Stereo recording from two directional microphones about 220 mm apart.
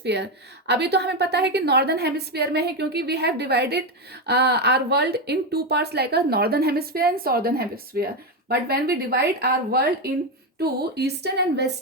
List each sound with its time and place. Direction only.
0.0 s speech: 50° right (ahead or behind)